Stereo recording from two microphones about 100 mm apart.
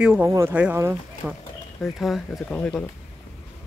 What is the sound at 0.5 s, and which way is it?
Speech, 15° right (ahead or behind).